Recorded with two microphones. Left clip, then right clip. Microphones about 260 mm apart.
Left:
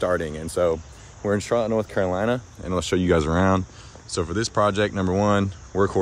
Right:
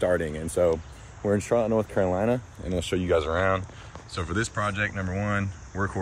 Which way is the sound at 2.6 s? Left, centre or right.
Left.